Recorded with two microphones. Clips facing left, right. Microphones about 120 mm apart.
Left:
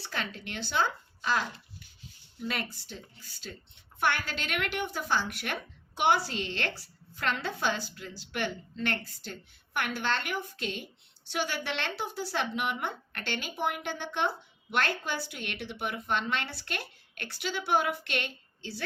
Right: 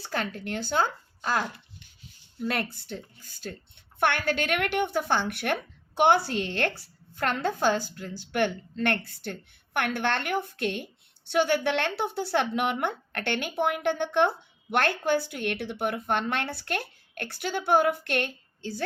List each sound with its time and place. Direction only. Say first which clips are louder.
0.0 s a woman's voice: right 5 dB; 45° right (ahead or behind)